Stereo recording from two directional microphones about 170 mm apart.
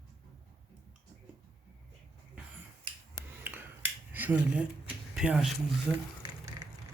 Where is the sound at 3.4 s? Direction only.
10° right (ahead or behind).